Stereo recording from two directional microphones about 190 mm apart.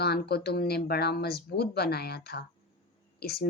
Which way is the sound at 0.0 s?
55° left (ahead or behind).